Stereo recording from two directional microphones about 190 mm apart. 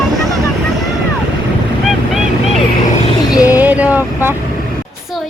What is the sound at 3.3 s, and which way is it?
Speech, 10° right (ahead or behind).